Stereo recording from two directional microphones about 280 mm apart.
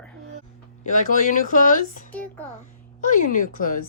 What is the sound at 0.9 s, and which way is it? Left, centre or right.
Speech, left.